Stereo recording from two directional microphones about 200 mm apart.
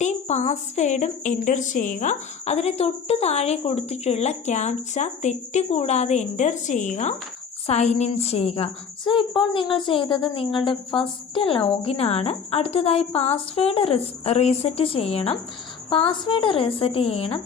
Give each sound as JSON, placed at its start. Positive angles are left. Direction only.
{"t": 0.0, "sound": "a woman's voice", "side_deg": 35}